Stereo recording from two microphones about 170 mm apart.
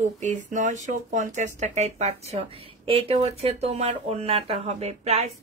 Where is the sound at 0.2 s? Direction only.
45° right (ahead or behind).